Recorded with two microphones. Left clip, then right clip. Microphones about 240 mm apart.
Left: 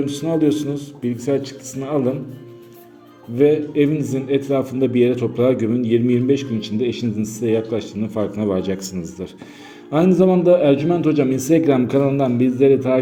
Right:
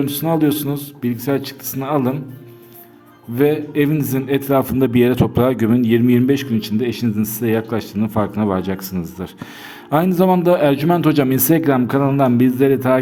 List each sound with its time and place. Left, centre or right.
0.0 s a man's voice: right
3.3 s a man's voice: right
9.9 s a man's voice: right